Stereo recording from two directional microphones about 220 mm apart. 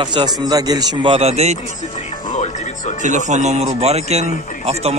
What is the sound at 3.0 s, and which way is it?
Speech, 35° right (ahead or behind).